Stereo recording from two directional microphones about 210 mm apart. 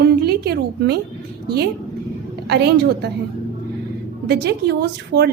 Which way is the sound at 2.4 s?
50° right (ahead or behind).